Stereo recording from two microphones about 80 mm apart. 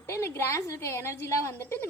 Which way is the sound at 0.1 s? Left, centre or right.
Left.